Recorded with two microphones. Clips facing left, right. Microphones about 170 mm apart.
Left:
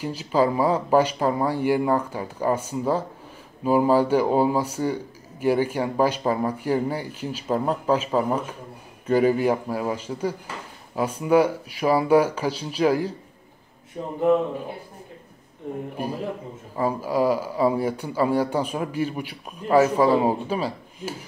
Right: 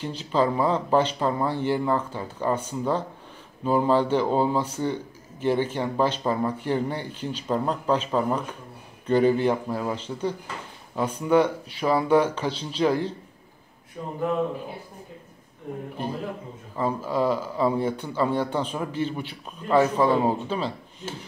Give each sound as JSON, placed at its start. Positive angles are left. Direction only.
{"t": 0.0, "sound": "speech", "side_deg": 10}
{"t": 14.0, "sound": "speech", "side_deg": 30}
{"t": 16.7, "sound": "speech", "side_deg": 10}